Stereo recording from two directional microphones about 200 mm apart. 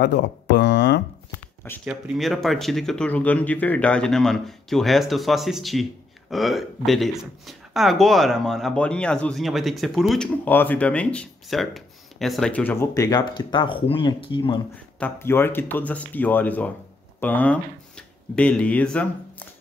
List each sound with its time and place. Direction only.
0.0 s speech: 60° left (ahead or behind)
1.9 s speech: centre (ahead or behind); by 14.6 s 25° left (ahead or behind)
15.0 s speech: 10° left (ahead or behind)